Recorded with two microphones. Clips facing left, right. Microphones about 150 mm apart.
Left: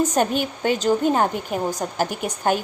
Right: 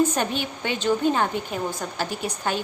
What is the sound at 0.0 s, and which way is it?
A woman's voice, 45° left (ahead or behind).